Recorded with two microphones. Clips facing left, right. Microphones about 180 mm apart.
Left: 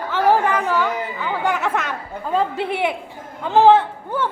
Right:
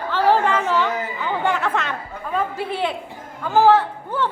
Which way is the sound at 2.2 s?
25° left (ahead or behind).